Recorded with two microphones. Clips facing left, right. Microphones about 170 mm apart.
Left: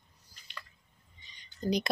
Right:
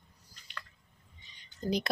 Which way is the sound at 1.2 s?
Centre (ahead or behind).